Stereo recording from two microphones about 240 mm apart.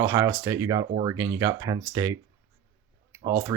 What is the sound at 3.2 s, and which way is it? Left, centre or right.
Speech, centre.